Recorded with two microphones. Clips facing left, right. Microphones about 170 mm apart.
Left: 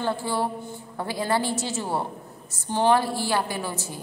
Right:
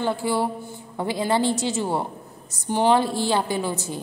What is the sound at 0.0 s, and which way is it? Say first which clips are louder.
A woman's voice: right 3 dB; 15° right (ahead or behind).